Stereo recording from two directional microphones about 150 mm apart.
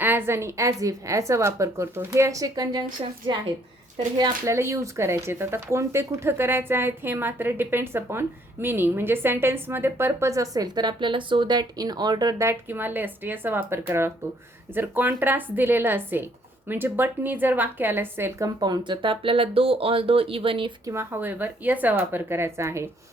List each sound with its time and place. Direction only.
0.0 s speech: 15° right (ahead or behind)
4.4 s a woman's voice: 20° right (ahead or behind); by 20.7 s 35° right (ahead or behind)
20.8 s a woman's voice: 15° right (ahead or behind)